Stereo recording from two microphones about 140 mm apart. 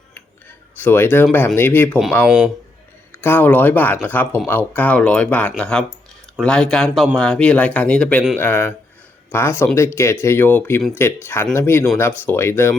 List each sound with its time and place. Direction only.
0.8 s speech: 15° left (ahead or behind)
2.2 s speech: 5° right (ahead or behind)
3.2 s speech: 15° left (ahead or behind)